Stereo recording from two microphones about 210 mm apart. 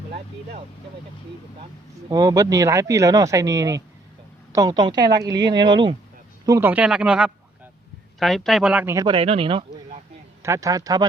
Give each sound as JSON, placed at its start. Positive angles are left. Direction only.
{"t": 2.0, "sound": "speech", "side_deg": -20}
{"t": 10.4, "sound": "speech", "side_deg": -15}